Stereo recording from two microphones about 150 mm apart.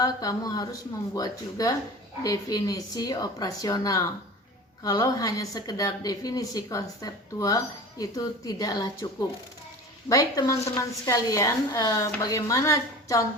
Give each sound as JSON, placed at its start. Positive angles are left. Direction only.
{"t": 0.0, "sound": "a woman's voice", "side_deg": 25}
{"t": 10.1, "sound": "a woman's voice", "side_deg": 25}